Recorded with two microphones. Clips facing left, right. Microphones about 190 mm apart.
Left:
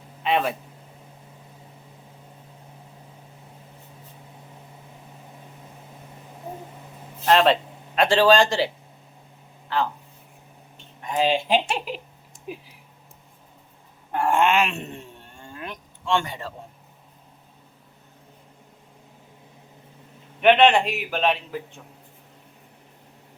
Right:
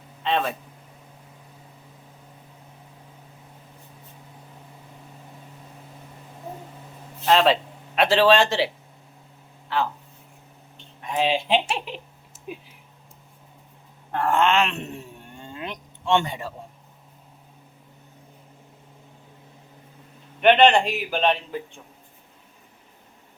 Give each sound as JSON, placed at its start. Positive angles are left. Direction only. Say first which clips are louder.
{"t": 0.2, "sound": "speech", "louder": "left 1 dB", "side_deg": 10}
{"t": 7.3, "sound": "a man's voice", "louder": "left 1 dB", "side_deg": 0}
{"t": 11.0, "sound": "speech", "louder": "left 1 dB", "side_deg": 0}
{"t": 14.1, "sound": "a man's voice", "louder": "even", "side_deg": 15}
{"t": 15.4, "sound": "a sound", "louder": "right 2 dB", "side_deg": -20}
{"t": 20.4, "sound": "a man's voice", "louder": "even", "side_deg": 0}